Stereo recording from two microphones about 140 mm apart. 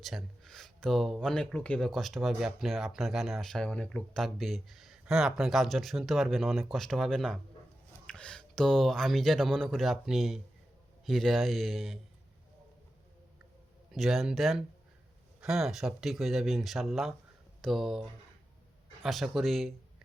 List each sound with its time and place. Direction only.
0.0 s speech: centre (ahead or behind)
13.9 s speech: centre (ahead or behind)
19.0 s speech: centre (ahead or behind)